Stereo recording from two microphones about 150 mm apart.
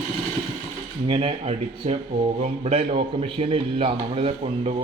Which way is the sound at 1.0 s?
35° right (ahead or behind).